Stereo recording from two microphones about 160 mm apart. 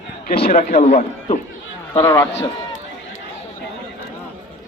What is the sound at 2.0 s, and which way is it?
Speech, 15° left (ahead or behind).